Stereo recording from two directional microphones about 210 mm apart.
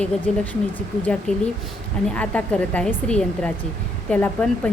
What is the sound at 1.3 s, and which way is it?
Speech, 5° left (ahead or behind).